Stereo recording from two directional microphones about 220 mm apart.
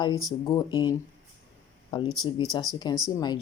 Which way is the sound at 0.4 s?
20° left (ahead or behind).